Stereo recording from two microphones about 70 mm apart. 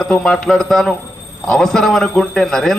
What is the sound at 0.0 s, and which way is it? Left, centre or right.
A man's voice, centre.